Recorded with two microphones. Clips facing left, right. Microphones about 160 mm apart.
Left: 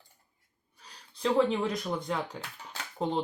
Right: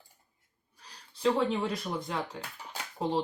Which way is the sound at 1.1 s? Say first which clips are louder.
Left 1 dB; centre (ahead or behind).